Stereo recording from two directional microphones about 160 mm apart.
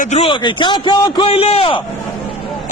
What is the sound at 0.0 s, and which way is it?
A man's voice, 40° left (ahead or behind).